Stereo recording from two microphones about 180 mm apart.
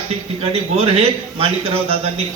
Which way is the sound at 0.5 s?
35° right (ahead or behind).